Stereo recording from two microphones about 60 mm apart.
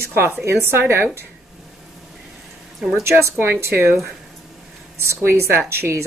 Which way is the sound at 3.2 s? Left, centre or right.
Right.